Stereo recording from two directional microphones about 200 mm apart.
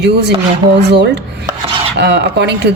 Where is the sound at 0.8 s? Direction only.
55° right (ahead or behind).